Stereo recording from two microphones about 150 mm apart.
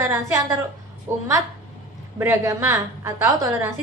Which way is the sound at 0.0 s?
20° right (ahead or behind).